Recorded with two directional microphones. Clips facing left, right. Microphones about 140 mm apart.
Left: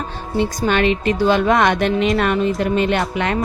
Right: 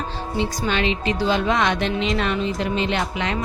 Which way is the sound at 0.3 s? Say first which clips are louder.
Left 6 dB; 55° left (ahead or behind).